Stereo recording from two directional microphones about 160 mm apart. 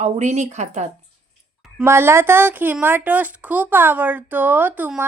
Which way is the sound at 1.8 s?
15° right (ahead or behind).